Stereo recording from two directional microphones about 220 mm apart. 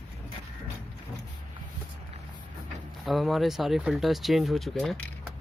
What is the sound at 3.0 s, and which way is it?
Speech, centre (ahead or behind).